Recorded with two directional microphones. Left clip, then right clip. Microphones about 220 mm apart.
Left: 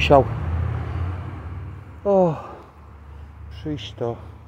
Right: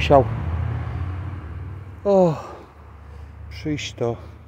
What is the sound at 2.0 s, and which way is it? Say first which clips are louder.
Speech: right 1 dB; 10° right (ahead or behind).